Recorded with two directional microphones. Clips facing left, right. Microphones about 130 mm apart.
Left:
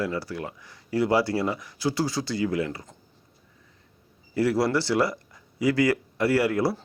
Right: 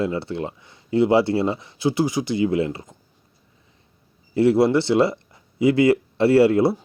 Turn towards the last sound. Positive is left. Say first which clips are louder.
# right 7 dB
turn(degrees=-25)  # may be behind; listen again after turning